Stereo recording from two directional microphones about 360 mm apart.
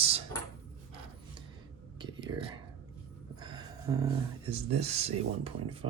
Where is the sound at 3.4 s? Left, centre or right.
Centre.